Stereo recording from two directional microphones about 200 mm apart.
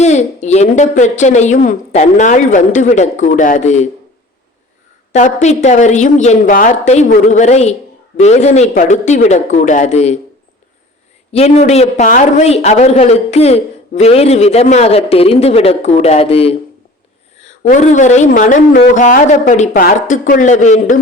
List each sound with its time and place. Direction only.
0.0 s a man's voice: 35° left (ahead or behind)
5.1 s a man's voice: 35° left (ahead or behind)
11.3 s a man's voice: 30° left (ahead or behind)